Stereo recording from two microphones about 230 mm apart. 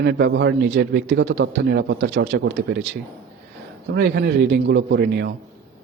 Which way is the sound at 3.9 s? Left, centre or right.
Right.